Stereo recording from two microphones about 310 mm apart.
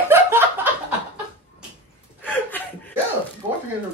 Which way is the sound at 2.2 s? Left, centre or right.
Centre.